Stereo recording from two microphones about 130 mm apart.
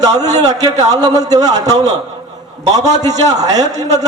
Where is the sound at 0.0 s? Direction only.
30° right (ahead or behind).